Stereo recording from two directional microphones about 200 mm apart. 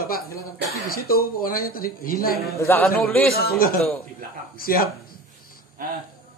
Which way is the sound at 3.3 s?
50° left (ahead or behind).